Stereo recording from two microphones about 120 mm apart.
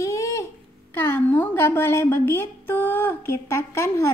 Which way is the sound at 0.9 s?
15° left (ahead or behind).